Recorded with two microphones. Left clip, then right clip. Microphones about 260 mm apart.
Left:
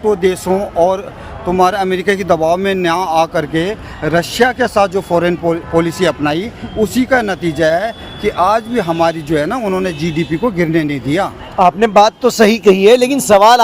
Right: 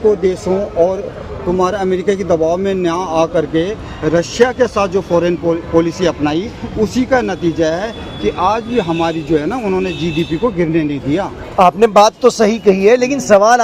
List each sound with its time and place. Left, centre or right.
0.2 s speech: left
1.5 s a man's voice: left
11.5 s speech: centre
12.4 s a man's voice: left